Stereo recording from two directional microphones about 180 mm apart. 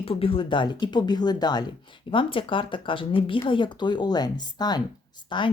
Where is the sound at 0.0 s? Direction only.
30° left (ahead or behind).